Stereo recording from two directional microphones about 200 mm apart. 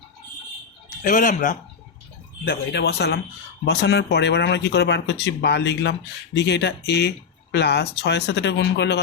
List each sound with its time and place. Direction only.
1.0 s speech: 40° left (ahead or behind)
2.4 s speech: 50° left (ahead or behind)